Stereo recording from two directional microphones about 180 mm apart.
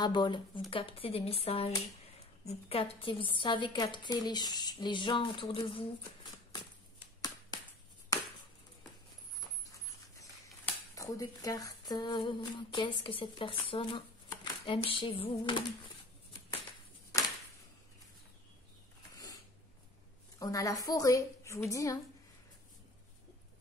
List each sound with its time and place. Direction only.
0.0 s a woman's voice: 25° left (ahead or behind)
8.1 s chop: 20° left (ahead or behind)
10.6 s speech: 20° left (ahead or behind)
20.3 s a woman's voice: 20° left (ahead or behind)